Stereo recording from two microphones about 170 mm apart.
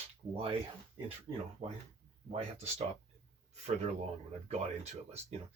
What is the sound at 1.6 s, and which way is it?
Speech, 35° right (ahead or behind).